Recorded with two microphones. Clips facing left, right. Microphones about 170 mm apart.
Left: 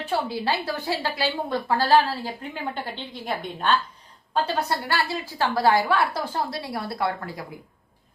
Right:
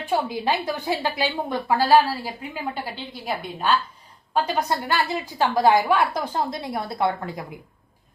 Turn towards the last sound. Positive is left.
turn(degrees=-20)  # may be behind; listen again after turning